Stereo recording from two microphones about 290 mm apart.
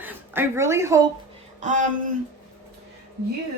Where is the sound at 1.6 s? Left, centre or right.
Right.